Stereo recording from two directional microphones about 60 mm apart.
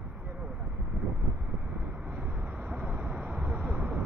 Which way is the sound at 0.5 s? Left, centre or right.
Right.